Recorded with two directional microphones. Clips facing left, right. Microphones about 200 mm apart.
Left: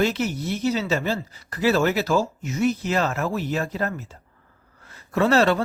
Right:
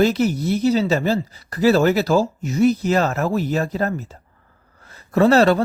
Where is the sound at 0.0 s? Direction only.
40° right (ahead or behind).